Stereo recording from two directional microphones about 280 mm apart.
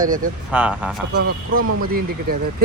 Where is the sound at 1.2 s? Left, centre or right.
Right.